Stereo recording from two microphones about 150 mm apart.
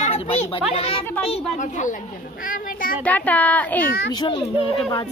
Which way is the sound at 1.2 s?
40° left (ahead or behind).